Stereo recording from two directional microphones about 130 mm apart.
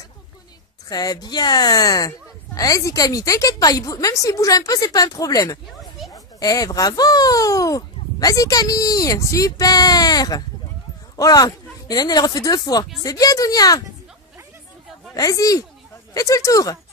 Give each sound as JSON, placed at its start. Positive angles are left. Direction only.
{"t": 0.8, "sound": "speech", "side_deg": 30}
{"t": 15.1, "sound": "speech", "side_deg": 25}